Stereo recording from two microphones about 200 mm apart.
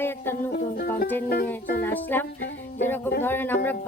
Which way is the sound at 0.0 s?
10° left (ahead or behind).